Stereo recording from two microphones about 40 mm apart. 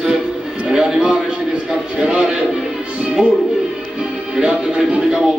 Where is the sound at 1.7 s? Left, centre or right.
Centre.